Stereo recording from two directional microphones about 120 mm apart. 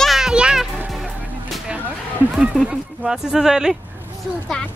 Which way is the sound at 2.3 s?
5° right (ahead or behind).